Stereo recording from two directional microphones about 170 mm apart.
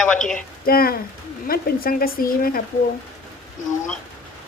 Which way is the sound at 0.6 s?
60° left (ahead or behind).